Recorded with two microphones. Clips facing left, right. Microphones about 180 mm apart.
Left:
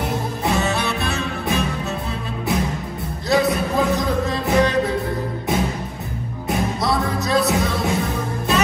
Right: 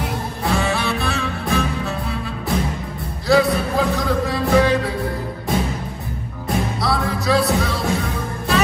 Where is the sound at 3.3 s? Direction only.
20° left (ahead or behind).